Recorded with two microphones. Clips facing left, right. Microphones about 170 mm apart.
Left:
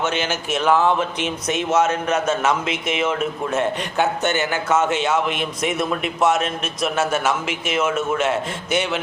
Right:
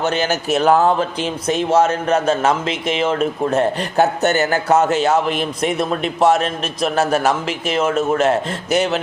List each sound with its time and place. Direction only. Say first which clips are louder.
0.0 s speech: right 4 dB; 40° right (ahead or behind)